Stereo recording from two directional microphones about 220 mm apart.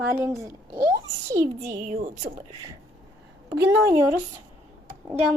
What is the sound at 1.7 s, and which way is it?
Speech, 40° right (ahead or behind).